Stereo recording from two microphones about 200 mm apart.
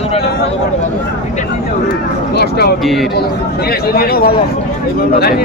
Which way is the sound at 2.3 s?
55° left (ahead or behind).